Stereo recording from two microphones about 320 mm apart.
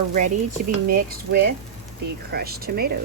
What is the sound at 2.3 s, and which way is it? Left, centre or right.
Speech, right.